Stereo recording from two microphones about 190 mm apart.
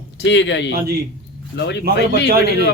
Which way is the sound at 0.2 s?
70° left (ahead or behind).